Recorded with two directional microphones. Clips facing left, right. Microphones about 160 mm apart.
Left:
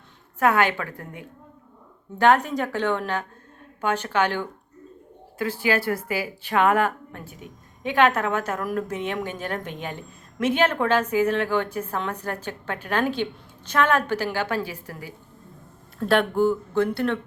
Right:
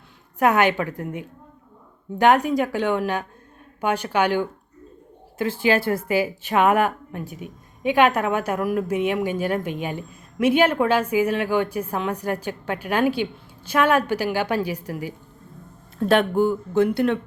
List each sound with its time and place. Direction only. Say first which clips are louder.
0.3 s a woman's voice: right 2 dB; 15° right (ahead or behind)
5.4 s a woman's voice: right 3 dB; 25° right (ahead or behind)